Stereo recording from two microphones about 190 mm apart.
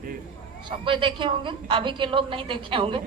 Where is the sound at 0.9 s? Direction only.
25° right (ahead or behind).